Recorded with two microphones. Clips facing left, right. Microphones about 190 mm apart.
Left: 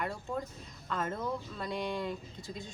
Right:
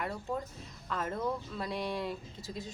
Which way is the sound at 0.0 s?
5° right (ahead or behind).